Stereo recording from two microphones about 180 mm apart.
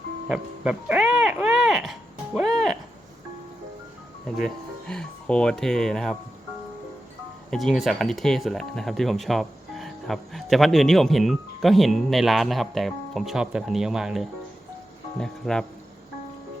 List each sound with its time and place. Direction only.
0.3 s a sound: 5° right (ahead or behind)
4.4 s speech: 5° left (ahead or behind)
7.5 s speech: centre (ahead or behind)